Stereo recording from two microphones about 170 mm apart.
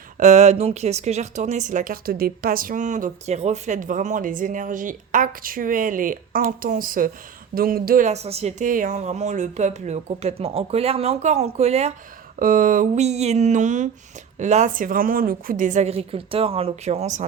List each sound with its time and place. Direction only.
0.2 s speech: 45° right (ahead or behind)
12.4 s speech: 55° right (ahead or behind)